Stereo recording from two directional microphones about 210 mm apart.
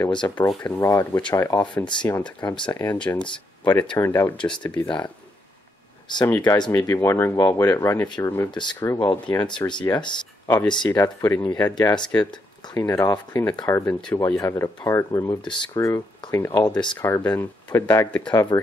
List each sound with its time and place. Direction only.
0.0 s speech: 20° left (ahead or behind)
0.4 s speech: 10° left (ahead or behind)
3.0 s speech: 5° left (ahead or behind)
4.8 s speech: 20° left (ahead or behind)